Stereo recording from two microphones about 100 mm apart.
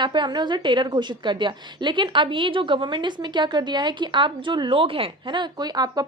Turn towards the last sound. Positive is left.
turn(degrees=-40)  # may be behind; listen again after turning